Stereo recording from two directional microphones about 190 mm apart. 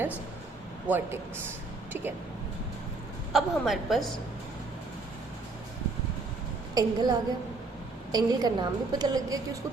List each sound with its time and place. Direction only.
0.9 s a man's voice: 10° right (ahead or behind)
3.3 s a woman's voice: centre (ahead or behind)
6.7 s a woman's voice: 20° right (ahead or behind)